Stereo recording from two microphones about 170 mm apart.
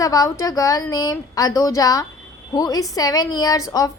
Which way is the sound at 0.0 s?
20° left (ahead or behind).